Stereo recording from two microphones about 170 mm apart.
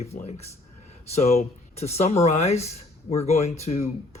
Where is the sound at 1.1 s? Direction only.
40° left (ahead or behind).